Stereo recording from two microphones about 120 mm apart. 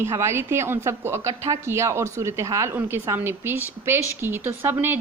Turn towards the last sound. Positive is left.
turn(degrees=-20)  # may be behind; listen again after turning